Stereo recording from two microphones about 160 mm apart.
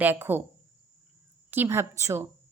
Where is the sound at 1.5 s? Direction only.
15° right (ahead or behind).